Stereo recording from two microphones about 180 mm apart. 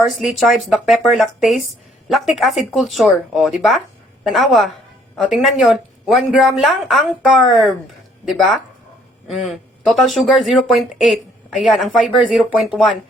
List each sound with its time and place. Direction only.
0.0 s speech: centre (ahead or behind)
9.3 s speech: centre (ahead or behind)